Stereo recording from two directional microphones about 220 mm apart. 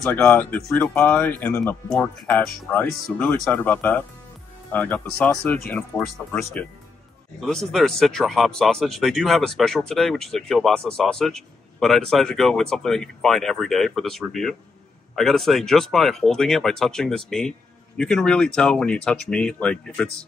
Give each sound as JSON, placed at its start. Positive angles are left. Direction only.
{"t": 0.0, "sound": "speech", "side_deg": 5}